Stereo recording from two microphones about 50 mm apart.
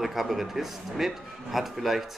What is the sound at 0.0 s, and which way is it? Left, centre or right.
Speech, centre.